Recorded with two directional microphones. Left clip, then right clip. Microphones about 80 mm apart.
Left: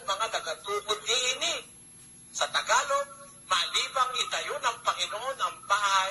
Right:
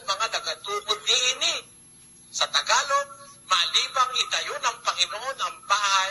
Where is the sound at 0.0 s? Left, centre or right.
Left.